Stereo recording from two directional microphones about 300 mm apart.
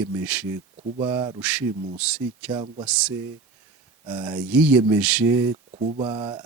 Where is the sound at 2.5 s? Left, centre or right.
Centre.